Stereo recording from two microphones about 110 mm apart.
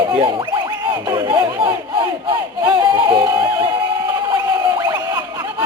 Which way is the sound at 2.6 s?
45° right (ahead or behind).